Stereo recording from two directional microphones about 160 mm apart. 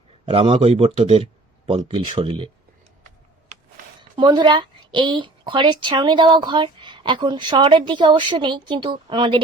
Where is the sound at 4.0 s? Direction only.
30° right (ahead or behind).